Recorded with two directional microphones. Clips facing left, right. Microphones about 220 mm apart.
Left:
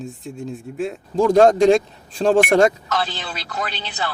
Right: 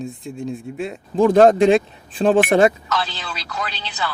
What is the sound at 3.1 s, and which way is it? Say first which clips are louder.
Speech: left 1 dB; 50° left (ahead or behind).